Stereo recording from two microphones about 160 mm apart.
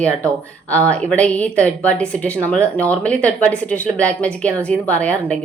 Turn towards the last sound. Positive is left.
turn(degrees=10)  # may be behind; listen again after turning